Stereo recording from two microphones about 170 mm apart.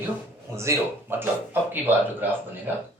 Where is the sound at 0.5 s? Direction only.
15° right (ahead or behind).